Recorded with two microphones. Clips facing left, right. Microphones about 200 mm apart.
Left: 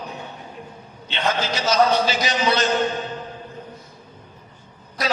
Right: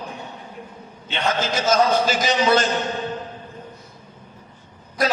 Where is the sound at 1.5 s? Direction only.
50° right (ahead or behind).